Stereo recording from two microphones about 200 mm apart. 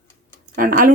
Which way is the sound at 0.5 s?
45° right (ahead or behind).